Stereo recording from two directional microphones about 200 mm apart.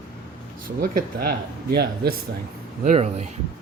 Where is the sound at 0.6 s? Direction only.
45° right (ahead or behind).